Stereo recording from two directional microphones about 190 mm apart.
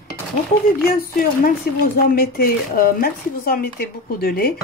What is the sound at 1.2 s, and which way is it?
Speech, 50° left (ahead or behind).